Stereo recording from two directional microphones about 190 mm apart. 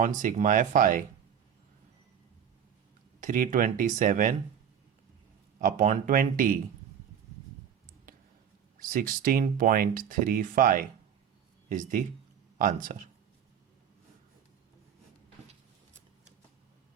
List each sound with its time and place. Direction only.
0.0 s speech: 40° right (ahead or behind)
3.2 s speech: 45° right (ahead or behind)
5.5 s speech: 40° right (ahead or behind)
8.8 s speech: 45° right (ahead or behind)